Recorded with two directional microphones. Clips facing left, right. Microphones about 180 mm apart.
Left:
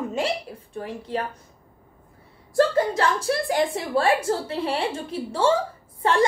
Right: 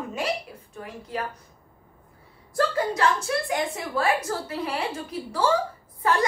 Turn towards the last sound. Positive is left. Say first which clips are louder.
# left 3 dB
turn(degrees=30)  # may be behind; listen again after turning